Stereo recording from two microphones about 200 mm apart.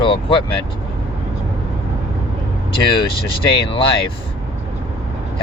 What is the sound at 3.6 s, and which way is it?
Speech, 25° left (ahead or behind).